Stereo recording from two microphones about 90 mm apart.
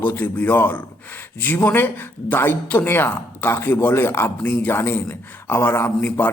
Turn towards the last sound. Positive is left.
turn(degrees=20)  # may be behind; listen again after turning